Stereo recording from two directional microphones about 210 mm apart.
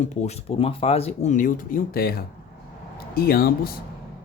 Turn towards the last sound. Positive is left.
turn(degrees=45)  # may be behind; listen again after turning